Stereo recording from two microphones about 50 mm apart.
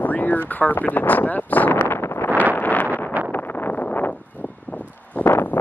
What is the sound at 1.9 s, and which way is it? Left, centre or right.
Wind noise, left.